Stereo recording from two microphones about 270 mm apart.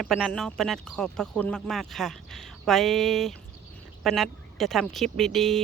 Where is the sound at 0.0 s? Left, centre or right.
Centre.